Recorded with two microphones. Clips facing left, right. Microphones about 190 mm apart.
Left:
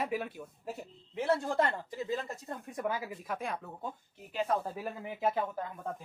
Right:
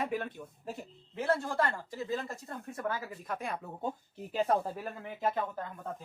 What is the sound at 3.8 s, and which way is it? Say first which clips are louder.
Speech: right 5 dB; 35° right (ahead or behind).